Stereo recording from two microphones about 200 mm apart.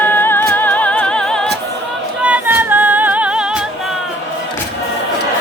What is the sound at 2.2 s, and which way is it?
Music, 10° right (ahead or behind).